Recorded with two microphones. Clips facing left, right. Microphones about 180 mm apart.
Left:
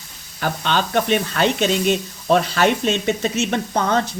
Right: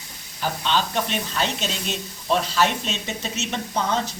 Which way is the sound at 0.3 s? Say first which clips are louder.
Left 3 dB; 60° left (ahead or behind).